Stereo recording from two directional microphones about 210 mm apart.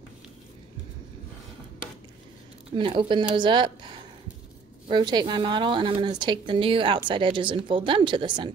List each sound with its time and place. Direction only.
2.7 s speech: 25° right (ahead or behind)